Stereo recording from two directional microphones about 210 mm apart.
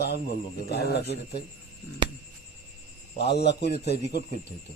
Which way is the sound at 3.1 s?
50° left (ahead or behind).